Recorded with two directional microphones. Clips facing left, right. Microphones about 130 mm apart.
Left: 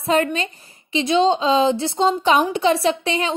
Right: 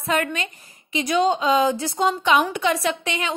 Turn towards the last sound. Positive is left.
turn(degrees=30)  # may be behind; listen again after turning